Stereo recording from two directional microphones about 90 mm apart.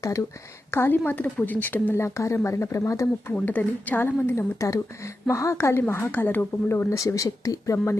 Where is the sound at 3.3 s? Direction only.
20° left (ahead or behind).